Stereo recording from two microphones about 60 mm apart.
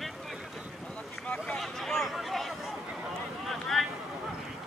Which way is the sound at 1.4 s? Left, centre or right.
Centre.